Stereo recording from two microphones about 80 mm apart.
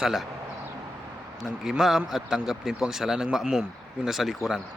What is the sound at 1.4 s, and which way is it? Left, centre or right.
A man's voice, centre.